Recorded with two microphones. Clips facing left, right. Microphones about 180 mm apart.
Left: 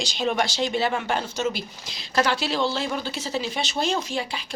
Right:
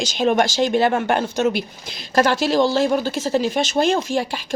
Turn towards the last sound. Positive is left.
turn(degrees=-50)  # may be behind; listen again after turning